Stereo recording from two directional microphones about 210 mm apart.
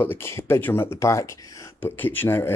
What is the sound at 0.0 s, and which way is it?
Speech, 10° left (ahead or behind).